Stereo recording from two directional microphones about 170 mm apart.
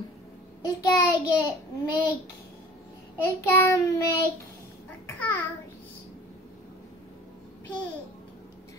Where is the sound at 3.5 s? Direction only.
15° left (ahead or behind).